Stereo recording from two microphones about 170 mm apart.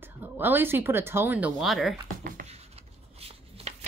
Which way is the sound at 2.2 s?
50° right (ahead or behind).